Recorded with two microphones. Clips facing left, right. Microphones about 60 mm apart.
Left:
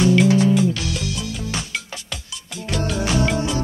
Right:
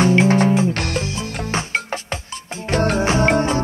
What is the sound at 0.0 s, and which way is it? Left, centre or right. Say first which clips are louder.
Music: right 1 dB; right.